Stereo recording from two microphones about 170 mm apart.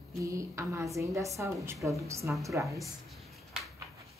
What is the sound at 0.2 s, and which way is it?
A woman's voice, 20° right (ahead or behind).